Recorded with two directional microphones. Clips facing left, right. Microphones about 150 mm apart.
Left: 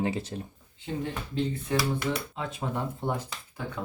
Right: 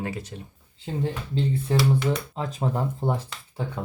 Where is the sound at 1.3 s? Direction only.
30° right (ahead or behind).